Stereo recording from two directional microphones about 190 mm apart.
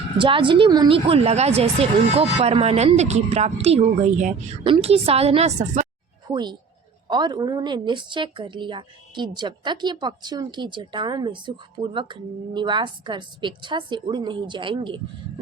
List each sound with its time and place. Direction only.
0.2 s a woman's voice: 25° right (ahead or behind)
6.2 s a woman's voice: 25° right (ahead or behind)